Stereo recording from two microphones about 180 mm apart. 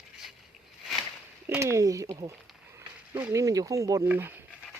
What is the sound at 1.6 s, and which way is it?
Speech, 15° right (ahead or behind).